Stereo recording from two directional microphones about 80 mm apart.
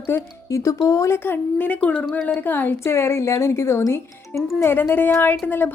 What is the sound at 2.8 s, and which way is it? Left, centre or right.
A woman's voice, left.